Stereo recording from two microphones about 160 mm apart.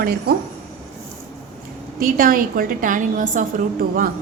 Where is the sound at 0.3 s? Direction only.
75° right (ahead or behind).